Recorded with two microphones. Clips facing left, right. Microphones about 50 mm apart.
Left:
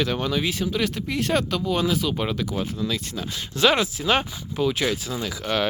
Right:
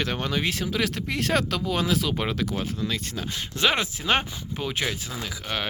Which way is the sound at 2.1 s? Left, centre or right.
Right.